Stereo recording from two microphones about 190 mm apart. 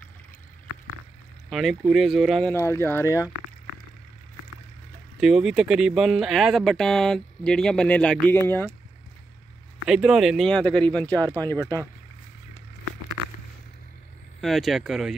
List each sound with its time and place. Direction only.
1.5 s speech: centre (ahead or behind)
2.5 s speech: 15° left (ahead or behind)
5.2 s speech: centre (ahead or behind)
9.8 s speech: 5° right (ahead or behind)
11.1 s speech: 20° right (ahead or behind)
14.4 s speech: centre (ahead or behind)